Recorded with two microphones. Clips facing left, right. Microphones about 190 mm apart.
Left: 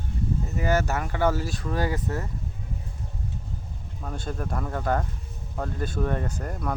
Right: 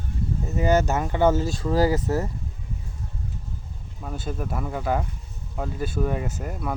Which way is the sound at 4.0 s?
5° right (ahead or behind).